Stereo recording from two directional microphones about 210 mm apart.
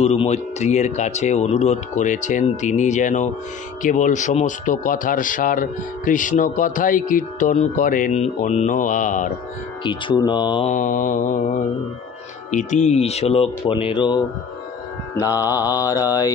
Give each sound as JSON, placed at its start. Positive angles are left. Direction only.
{"t": 0.0, "sound": "speech", "side_deg": 30}
{"t": 9.8, "sound": "speech", "side_deg": 20}
{"t": 10.7, "sound": "speech", "side_deg": 40}
{"t": 15.1, "sound": "mantra", "side_deg": 15}